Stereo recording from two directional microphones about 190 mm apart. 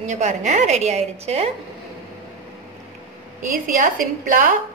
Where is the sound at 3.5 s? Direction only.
45° right (ahead or behind).